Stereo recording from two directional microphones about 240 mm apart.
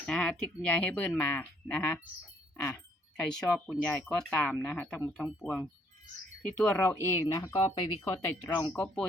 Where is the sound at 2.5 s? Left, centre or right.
Centre.